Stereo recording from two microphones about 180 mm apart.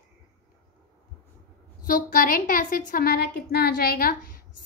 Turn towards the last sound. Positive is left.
turn(degrees=55)  # may be behind; listen again after turning